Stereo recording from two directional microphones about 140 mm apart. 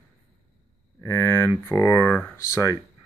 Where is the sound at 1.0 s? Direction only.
20° left (ahead or behind).